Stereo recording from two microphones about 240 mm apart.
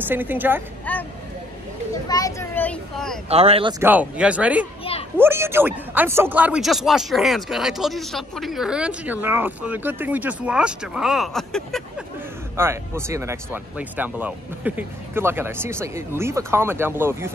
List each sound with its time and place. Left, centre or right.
0.1 s speech: centre
0.9 s vehicle: centre
2.0 s a child's voice: centre
3.3 s speech: right
3.8 s speech: centre
12.5 s speech: centre